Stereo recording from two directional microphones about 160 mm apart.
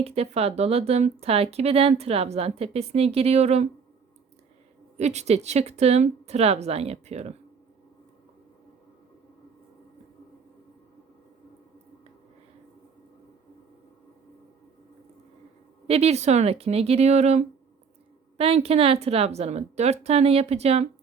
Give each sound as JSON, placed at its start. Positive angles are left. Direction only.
{"t": 0.0, "sound": "speech", "side_deg": -40}
{"t": 4.9, "sound": "speech", "side_deg": -45}
{"t": 15.9, "sound": "speech", "side_deg": -40}